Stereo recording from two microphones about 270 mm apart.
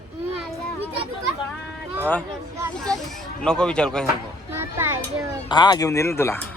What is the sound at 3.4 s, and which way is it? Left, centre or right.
Speech, centre.